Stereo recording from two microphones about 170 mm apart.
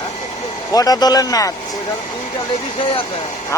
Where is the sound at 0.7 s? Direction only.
20° left (ahead or behind).